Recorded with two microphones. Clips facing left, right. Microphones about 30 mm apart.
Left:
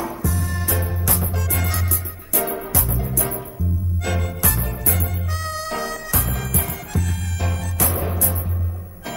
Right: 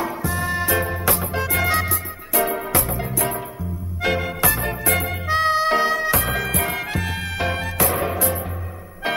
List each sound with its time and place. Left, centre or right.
0.0 s music: right
2.7 s music: right
4.0 s music: right
4.6 s music: right
6.5 s music: right